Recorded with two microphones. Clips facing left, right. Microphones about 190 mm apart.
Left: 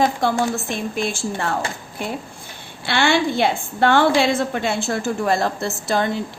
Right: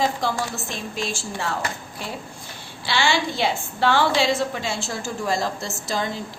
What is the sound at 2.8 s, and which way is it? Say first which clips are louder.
A woman's voice: left 4 dB; 55° left (ahead or behind).